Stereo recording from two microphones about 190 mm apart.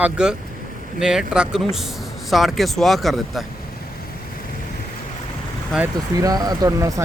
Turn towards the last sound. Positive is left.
turn(degrees=-15)  # may be behind; listen again after turning